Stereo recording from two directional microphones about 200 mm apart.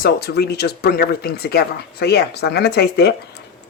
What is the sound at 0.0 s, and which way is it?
Speech, 55° left (ahead or behind).